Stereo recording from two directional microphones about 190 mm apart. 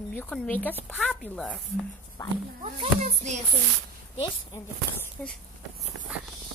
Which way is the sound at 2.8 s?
40° right (ahead or behind).